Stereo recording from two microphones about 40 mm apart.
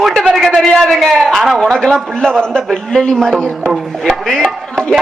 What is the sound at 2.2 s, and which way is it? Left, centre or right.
A man's voice, left.